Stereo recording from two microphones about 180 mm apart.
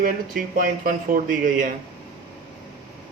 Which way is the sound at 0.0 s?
50° right (ahead or behind).